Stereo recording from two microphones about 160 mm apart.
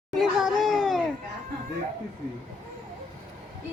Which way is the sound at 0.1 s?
Centre (ahead or behind).